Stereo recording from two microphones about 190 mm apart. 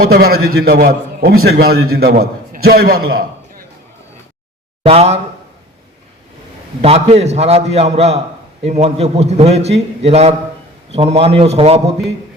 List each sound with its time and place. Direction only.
0.0 s a man's voice: 50° right (ahead or behind)
4.8 s speech: 30° right (ahead or behind)
6.8 s a man's voice: 35° right (ahead or behind)